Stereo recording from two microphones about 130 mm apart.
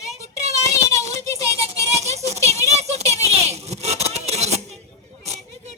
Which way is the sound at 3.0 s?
25° left (ahead or behind).